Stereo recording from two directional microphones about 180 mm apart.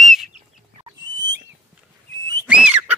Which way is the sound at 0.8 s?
25° right (ahead or behind).